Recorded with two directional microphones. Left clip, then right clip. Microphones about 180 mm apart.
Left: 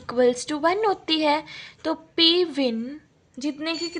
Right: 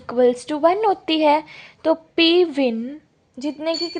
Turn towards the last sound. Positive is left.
turn(degrees=-25)  # may be behind; listen again after turning